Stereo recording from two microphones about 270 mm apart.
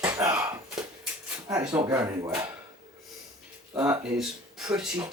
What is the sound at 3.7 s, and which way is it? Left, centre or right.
Speech, centre.